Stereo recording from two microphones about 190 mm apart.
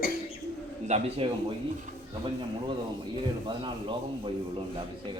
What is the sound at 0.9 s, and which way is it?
Speech, 30° right (ahead or behind).